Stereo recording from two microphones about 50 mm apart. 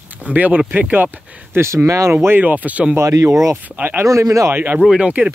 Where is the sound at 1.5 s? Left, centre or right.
Right.